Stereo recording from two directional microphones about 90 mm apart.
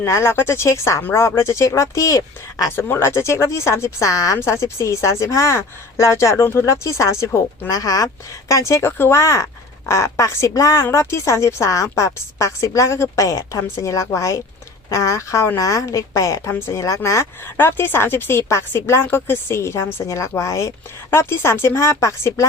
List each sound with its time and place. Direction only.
0.0 s a woman's voice: 25° left (ahead or behind)
2.7 s a woman's voice: 25° left (ahead or behind)